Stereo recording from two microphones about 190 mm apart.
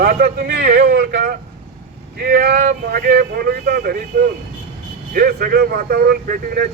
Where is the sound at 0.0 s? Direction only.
50° right (ahead or behind).